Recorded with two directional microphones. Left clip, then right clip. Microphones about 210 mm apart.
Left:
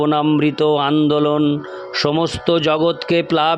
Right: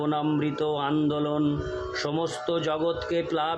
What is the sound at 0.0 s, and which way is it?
Speech, 45° left (ahead or behind).